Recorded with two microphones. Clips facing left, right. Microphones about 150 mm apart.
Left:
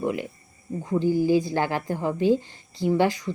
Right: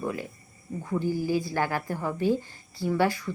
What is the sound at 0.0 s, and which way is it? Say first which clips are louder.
A woman's voice: left 5 dB; 20° left (ahead or behind).